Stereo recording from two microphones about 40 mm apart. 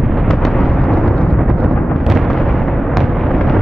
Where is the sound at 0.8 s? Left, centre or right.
Left.